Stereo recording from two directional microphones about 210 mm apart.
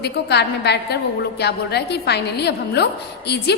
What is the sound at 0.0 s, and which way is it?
A woman's voice, 50° left (ahead or behind).